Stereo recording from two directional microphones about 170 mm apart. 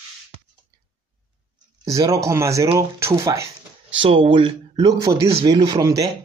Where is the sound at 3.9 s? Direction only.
30° right (ahead or behind).